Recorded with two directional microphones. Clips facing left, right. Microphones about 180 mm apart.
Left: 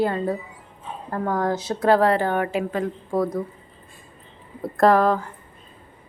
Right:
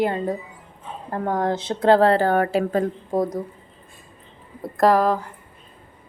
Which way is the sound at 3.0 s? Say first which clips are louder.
Even; 15° right (ahead or behind).